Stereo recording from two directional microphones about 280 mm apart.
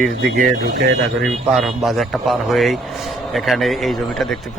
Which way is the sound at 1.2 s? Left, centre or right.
Centre.